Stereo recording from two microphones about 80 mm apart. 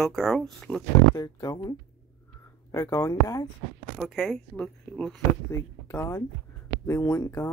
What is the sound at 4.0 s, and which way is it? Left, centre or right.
Speech, centre.